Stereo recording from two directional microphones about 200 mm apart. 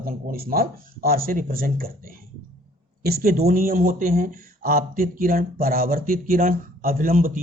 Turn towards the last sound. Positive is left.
turn(degrees=-45)  # may be behind; listen again after turning